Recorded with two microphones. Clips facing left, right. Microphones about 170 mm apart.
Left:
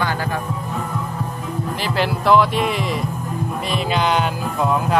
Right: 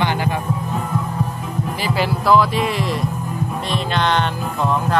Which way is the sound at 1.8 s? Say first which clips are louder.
Right 1 dB; 5° right (ahead or behind).